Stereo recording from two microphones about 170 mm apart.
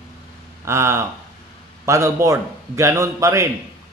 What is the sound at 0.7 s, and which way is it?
A man's voice, 15° right (ahead or behind).